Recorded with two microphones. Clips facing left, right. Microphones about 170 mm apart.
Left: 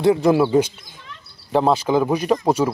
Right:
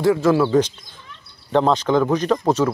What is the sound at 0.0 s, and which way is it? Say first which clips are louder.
Speech: left 1 dB; 20° left (ahead or behind).